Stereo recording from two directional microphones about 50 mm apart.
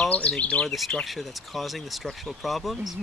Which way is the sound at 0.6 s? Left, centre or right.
Centre.